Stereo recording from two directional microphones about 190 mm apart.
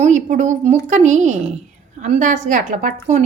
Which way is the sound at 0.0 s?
40° right (ahead or behind).